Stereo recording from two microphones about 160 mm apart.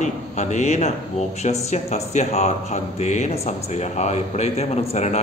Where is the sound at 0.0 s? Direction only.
50° left (ahead or behind).